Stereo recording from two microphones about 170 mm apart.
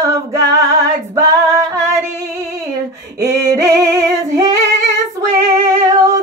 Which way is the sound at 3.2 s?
20° right (ahead or behind).